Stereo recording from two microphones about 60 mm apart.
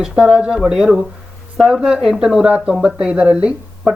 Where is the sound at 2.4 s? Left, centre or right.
Right.